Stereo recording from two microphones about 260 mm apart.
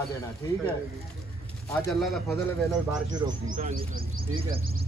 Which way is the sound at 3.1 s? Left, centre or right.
Centre.